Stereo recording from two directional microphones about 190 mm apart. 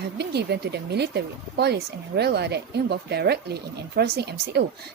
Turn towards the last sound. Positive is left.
turn(degrees=-60)  # may be behind; listen again after turning